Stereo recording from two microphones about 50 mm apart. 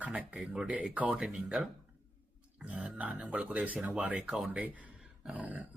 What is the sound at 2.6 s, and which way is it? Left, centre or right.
Speech, right.